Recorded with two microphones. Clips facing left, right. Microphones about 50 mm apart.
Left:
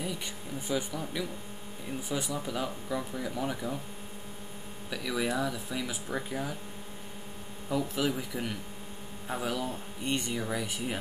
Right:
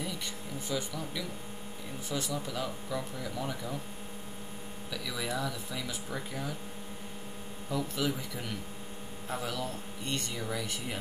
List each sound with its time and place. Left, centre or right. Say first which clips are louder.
0.0 s vehicle: left 1 dB; centre
2.0 s speech: left 1 dB; centre
4.9 s speech: left 5 dB; centre
7.7 s speech: left 3 dB; centre